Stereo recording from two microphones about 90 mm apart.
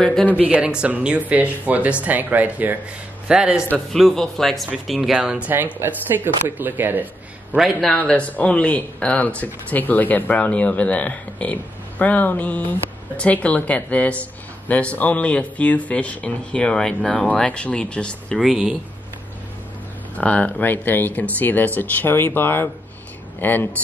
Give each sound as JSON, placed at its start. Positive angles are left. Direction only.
{"t": 0.0, "sound": "speech", "side_deg": 5}
{"t": 0.4, "sound": "speech", "side_deg": -10}
{"t": 3.7, "sound": "speech", "side_deg": 5}
{"t": 5.5, "sound": "speech", "side_deg": -20}
{"t": 7.5, "sound": "speech", "side_deg": -5}
{"t": 7.9, "sound": "speech", "side_deg": 15}
{"t": 18.4, "sound": "speech", "side_deg": -5}
{"t": 20.2, "sound": "speech", "side_deg": 15}